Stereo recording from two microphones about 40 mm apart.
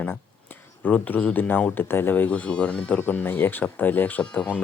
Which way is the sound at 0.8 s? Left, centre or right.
Left.